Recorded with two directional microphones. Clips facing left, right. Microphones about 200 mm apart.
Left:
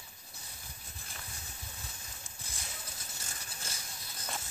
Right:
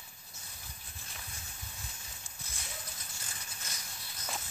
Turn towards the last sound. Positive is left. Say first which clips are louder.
# left 2 dB
turn(degrees=30)  # may be behind; listen again after turning